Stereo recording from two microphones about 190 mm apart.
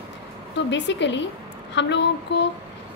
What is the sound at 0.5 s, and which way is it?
A woman's voice, 70° left (ahead or behind).